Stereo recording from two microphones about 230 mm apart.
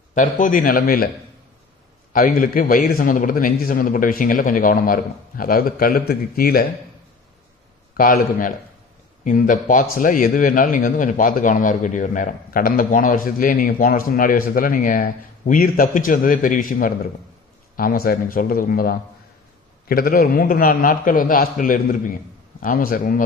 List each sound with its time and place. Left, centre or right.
0.1 s a man's voice: left
2.1 s a man's voice: left
7.9 s a man's voice: left